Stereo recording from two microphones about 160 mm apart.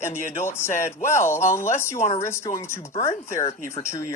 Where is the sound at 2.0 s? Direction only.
40° left (ahead or behind).